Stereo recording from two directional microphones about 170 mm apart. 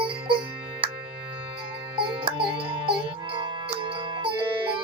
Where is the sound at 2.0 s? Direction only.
30° right (ahead or behind).